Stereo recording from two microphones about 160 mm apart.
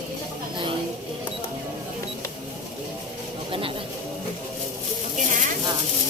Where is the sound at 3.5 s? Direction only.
35° right (ahead or behind).